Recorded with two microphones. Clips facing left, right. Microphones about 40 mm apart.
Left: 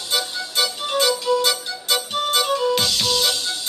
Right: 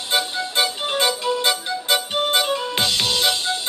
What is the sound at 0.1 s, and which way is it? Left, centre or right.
Music, right.